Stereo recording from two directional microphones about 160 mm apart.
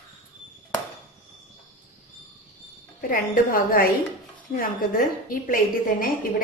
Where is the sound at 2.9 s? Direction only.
65° left (ahead or behind).